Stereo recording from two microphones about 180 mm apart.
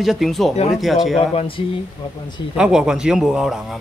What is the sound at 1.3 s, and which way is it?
Speech, 30° left (ahead or behind).